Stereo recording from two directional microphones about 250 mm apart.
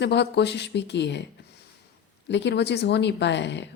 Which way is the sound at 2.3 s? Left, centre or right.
Left.